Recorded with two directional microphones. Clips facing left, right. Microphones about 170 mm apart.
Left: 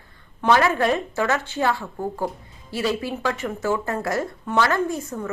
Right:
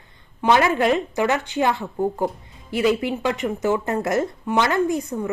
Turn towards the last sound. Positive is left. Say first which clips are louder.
# right 4 dB
turn(degrees=-15)  # may be behind; listen again after turning